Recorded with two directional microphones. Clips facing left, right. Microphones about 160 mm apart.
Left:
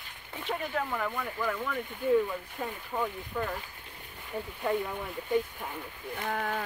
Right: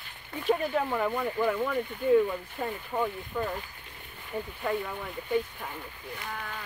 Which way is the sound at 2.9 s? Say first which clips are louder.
Right 2 dB; 15° right (ahead or behind).